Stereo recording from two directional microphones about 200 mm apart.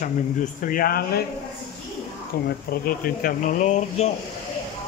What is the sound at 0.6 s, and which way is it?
Speech, 45° left (ahead or behind).